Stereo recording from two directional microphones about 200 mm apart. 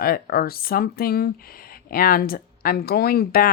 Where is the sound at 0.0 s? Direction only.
50° left (ahead or behind).